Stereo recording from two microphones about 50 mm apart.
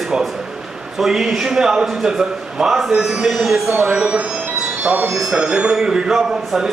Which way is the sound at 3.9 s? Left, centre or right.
Right.